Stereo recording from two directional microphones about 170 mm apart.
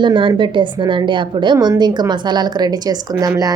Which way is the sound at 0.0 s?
30° right (ahead or behind).